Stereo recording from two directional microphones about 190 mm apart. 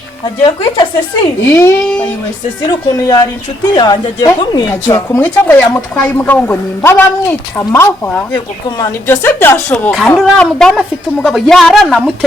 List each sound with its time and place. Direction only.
0.4 s speech: 25° left (ahead or behind)
1.5 s speech: 15° left (ahead or behind)
2.9 s speech: 20° left (ahead or behind)
8.3 s speech: 20° left (ahead or behind)
9.0 s a woman's voice: 10° left (ahead or behind)